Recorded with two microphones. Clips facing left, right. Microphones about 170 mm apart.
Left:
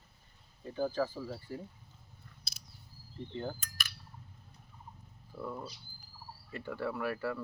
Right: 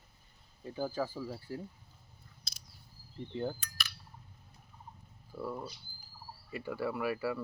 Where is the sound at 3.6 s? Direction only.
50° left (ahead or behind).